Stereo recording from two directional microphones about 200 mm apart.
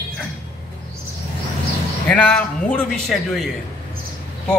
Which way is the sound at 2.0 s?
5° left (ahead or behind).